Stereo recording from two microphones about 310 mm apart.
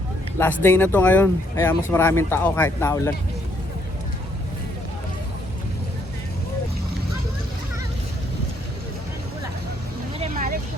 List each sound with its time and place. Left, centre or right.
0.3 s speech: centre
10.2 s vehicle: right